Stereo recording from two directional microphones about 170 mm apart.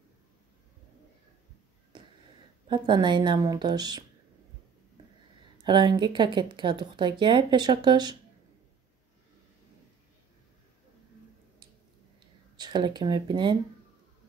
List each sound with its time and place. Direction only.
2.7 s speech: 30° right (ahead or behind)
5.6 s speech: 25° right (ahead or behind)
12.5 s speech: 25° right (ahead or behind)